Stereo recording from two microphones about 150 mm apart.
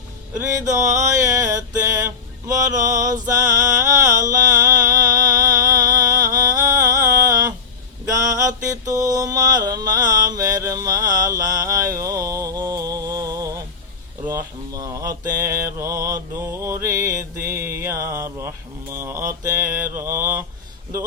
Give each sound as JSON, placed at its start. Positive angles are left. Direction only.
{"t": 0.4, "sound": "mantra", "side_deg": -20}